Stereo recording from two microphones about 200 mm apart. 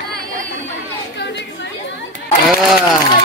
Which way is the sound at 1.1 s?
60° left (ahead or behind).